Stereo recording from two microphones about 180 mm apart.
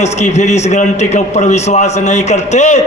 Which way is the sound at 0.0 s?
40° left (ahead or behind).